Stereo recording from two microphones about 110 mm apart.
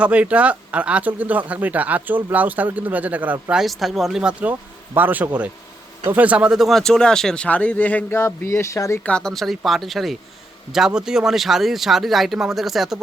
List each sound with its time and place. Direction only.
0.0 s speech: 10° right (ahead or behind)
3.5 s speech: centre (ahead or behind); by 9.0 s 25° left (ahead or behind)
9.0 s speech: 5° left (ahead or behind)